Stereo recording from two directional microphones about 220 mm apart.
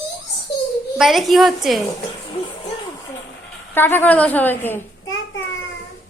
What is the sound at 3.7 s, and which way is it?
A child's voice, 10° left (ahead or behind).